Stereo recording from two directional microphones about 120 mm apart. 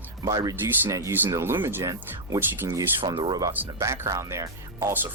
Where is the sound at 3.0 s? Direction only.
40° right (ahead or behind).